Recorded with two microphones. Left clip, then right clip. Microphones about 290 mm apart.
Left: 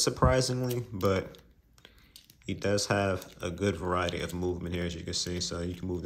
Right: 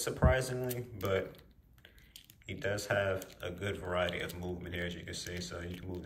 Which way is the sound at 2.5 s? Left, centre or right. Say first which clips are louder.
Left 6 dB; centre.